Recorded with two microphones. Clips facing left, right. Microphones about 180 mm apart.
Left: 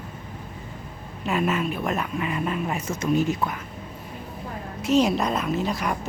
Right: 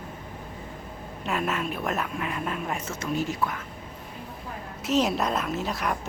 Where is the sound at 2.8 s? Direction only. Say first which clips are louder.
Left 9 dB; 15° left (ahead or behind).